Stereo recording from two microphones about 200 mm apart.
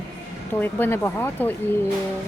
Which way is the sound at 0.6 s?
10° left (ahead or behind).